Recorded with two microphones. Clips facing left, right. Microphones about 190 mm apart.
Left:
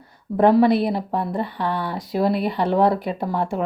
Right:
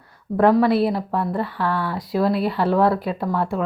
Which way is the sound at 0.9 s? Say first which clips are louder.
Right 1 dB; 20° left (ahead or behind).